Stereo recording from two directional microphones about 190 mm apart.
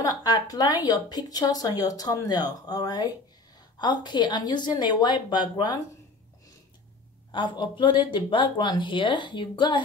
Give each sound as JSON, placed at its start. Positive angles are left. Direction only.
{"t": 0.0, "sound": "speech", "side_deg": 20}
{"t": 7.2, "sound": "speech", "side_deg": 25}